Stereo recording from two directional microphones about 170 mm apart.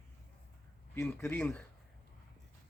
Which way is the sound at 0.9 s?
15° left (ahead or behind).